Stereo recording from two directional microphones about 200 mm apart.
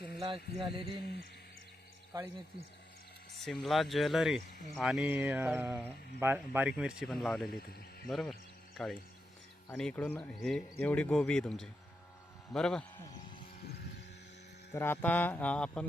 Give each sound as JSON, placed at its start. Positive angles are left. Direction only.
{"t": 0.2, "sound": "speech", "side_deg": -25}
{"t": 2.1, "sound": "a sound", "side_deg": -20}
{"t": 3.4, "sound": "speech", "side_deg": 0}
{"t": 4.8, "sound": "a sound", "side_deg": 0}
{"t": 5.5, "sound": "speech", "side_deg": -5}
{"t": 9.7, "sound": "speech", "side_deg": 5}
{"t": 14.7, "sound": "speech", "side_deg": 10}